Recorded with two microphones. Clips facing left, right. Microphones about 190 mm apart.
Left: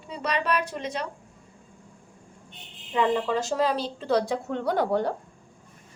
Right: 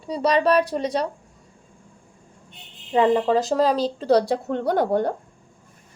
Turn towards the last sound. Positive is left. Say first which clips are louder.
# right 4 dB
turn(degrees=-50)  # may be behind; listen again after turning